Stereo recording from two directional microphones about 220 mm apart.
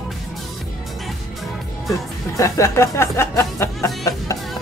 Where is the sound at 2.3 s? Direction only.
15° left (ahead or behind).